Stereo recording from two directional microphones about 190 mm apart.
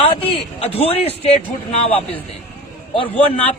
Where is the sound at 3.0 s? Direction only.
30° left (ahead or behind).